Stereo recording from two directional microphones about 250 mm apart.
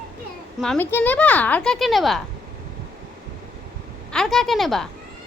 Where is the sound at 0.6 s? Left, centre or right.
Centre.